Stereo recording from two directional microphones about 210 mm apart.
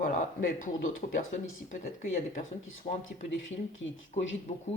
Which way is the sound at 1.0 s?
35° left (ahead or behind).